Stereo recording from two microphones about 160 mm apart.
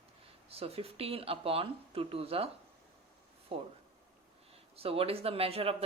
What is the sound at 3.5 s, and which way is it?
Speech, 35° right (ahead or behind).